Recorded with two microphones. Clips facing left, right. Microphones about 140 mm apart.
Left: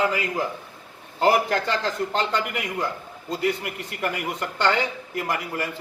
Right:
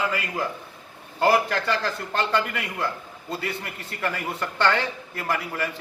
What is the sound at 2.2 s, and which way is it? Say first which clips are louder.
A man's voice: right 5 dB; 15° left (ahead or behind).